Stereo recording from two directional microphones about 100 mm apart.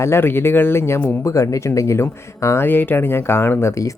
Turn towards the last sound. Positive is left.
turn(degrees=30)  # may be behind; listen again after turning